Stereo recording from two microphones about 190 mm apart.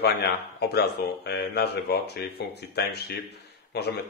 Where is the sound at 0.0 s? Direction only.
60° left (ahead or behind).